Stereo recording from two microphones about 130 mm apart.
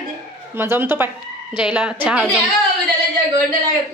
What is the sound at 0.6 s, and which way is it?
Speech, 15° right (ahead or behind).